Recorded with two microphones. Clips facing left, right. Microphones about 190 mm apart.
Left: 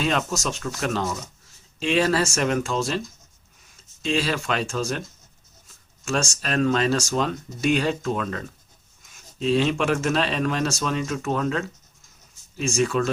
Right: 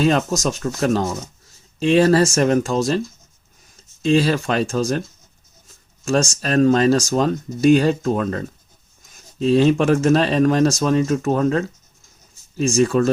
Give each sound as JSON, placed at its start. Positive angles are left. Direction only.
{"t": 0.0, "sound": "speech", "side_deg": -40}
{"t": 4.0, "sound": "speech", "side_deg": -40}
{"t": 6.1, "sound": "speech", "side_deg": -35}